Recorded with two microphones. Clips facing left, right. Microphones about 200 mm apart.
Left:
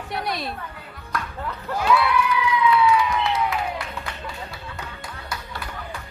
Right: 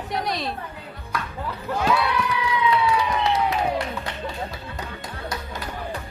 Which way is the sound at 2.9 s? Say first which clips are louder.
Left 1 dB; 35° right (ahead or behind).